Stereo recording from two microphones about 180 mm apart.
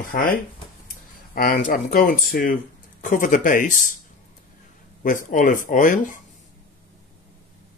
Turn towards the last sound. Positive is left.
turn(degrees=45)  # may be behind; listen again after turning